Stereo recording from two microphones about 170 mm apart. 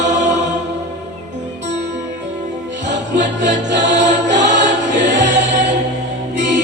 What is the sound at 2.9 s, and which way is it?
Music, 90° right.